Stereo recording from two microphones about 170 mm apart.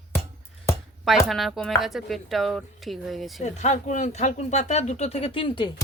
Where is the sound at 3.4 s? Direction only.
45° left (ahead or behind).